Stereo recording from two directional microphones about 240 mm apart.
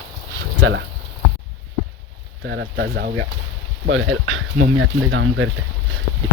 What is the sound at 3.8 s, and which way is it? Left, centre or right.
Speech, right.